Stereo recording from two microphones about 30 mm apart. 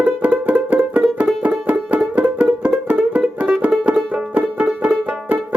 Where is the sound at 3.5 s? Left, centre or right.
Right.